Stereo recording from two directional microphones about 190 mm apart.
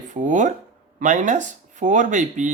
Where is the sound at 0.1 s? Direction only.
40° right (ahead or behind).